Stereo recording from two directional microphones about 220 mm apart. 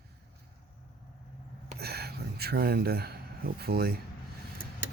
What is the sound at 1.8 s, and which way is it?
Speech, 45° right (ahead or behind).